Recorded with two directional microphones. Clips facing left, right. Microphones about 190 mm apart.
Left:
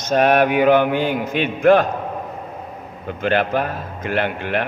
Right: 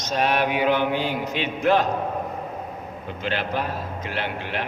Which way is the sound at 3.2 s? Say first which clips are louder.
Left 8 dB; 55° left (ahead or behind).